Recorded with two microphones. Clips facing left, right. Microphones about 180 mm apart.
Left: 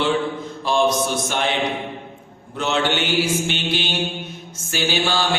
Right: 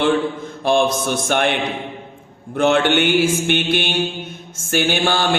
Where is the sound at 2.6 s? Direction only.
55° right (ahead or behind).